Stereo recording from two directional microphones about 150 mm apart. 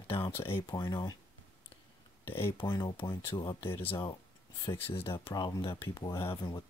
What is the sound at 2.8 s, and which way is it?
Speech, 35° left (ahead or behind).